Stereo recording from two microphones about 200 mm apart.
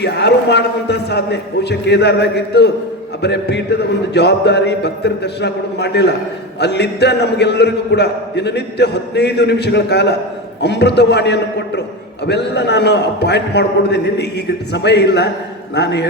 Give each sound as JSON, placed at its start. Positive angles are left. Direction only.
{"t": 0.0, "sound": "a man's voice", "side_deg": 55}